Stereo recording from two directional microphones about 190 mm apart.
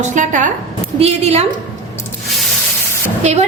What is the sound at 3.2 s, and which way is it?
Speech, 35° right (ahead or behind).